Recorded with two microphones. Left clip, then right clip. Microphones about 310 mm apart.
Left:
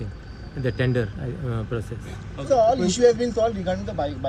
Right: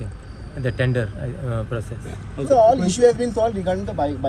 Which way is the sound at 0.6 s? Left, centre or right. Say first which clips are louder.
Right 1 dB; centre.